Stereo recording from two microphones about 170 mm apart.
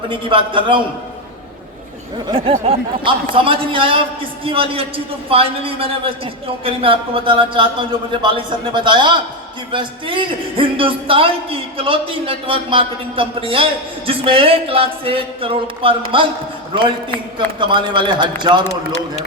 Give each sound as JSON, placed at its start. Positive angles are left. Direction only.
{"t": 0.1, "sound": "a man's voice", "side_deg": -30}
{"t": 2.1, "sound": "a man's voice", "side_deg": -30}